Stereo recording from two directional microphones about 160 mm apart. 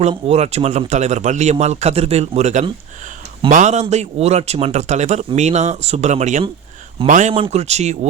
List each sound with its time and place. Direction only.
0.0 s speech: 45° right (ahead or behind)
7.3 s speech: 35° right (ahead or behind)